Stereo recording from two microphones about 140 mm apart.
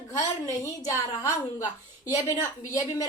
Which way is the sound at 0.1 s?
25° left (ahead or behind).